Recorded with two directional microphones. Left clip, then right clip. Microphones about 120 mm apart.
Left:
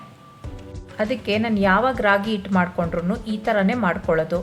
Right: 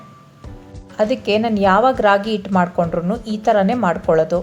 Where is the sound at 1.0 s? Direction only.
30° right (ahead or behind).